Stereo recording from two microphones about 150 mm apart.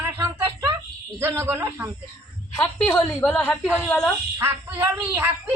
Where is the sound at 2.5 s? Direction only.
15° left (ahead or behind).